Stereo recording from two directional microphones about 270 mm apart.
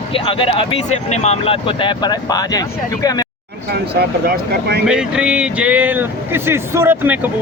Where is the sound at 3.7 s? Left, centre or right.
Right.